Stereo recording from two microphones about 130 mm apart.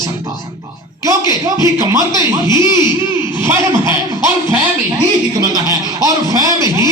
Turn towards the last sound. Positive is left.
turn(degrees=-30)  # may be behind; listen again after turning